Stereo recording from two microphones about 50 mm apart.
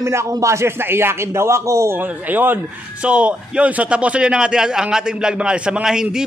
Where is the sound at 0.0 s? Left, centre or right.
Right.